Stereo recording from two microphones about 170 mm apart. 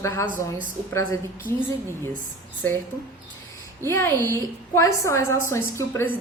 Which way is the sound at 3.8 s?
15° left (ahead or behind).